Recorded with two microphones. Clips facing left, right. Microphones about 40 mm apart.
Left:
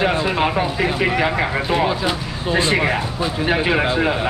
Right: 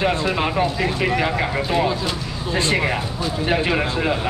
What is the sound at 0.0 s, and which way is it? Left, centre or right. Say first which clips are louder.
Speech: left 2 dB; centre.